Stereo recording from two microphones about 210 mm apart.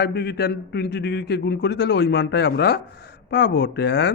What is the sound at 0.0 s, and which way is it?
A man's voice, 50° left (ahead or behind).